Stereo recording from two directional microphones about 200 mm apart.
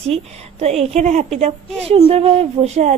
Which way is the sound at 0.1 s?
30° right (ahead or behind).